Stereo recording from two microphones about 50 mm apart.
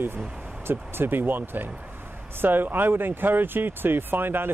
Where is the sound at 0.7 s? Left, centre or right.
Right.